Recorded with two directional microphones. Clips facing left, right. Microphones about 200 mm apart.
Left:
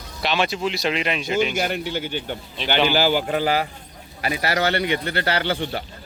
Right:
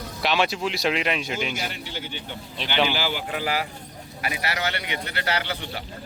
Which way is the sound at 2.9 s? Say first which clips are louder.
Left 8 dB; 40° left (ahead or behind).